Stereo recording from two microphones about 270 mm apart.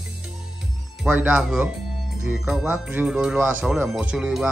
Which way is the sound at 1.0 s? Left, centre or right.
Centre.